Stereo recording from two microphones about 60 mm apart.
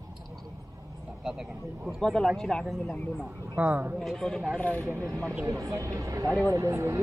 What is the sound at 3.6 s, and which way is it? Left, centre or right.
Speech, right.